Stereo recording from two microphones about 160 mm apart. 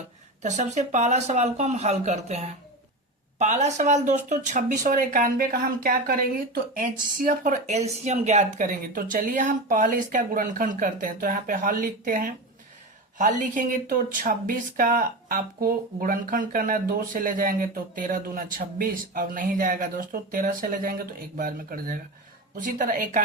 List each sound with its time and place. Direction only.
0.4 s speech: 50° right (ahead or behind)
9.0 s speech: 60° right (ahead or behind)